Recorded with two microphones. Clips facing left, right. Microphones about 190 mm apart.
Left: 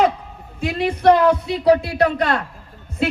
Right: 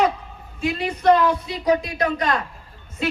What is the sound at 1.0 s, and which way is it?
Speech, 65° left (ahead or behind).